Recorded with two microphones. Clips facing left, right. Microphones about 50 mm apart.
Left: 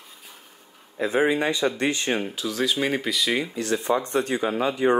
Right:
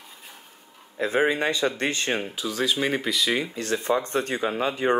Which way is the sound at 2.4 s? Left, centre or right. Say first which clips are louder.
Left 1 dB; centre.